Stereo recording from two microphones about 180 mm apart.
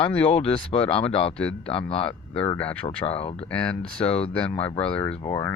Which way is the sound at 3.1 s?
30° left (ahead or behind).